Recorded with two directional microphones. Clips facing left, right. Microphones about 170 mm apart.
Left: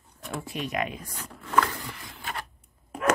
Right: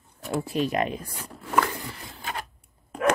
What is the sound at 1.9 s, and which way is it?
Printer, 35° right (ahead or behind).